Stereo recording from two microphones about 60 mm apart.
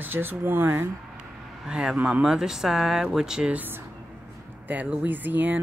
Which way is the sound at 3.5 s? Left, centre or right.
Right.